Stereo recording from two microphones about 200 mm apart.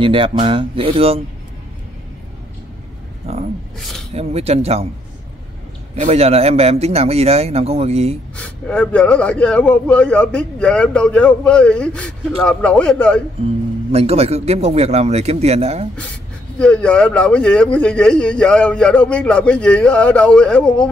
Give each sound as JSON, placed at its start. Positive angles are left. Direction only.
{"t": 0.0, "sound": "speech", "side_deg": -25}
{"t": 3.3, "sound": "a man's voice", "side_deg": -30}
{"t": 5.9, "sound": "a man's voice", "side_deg": -35}
{"t": 8.4, "sound": "a man's voice", "side_deg": 5}
{"t": 13.9, "sound": "a man's voice", "side_deg": -30}
{"t": 16.5, "sound": "a man's voice", "side_deg": 5}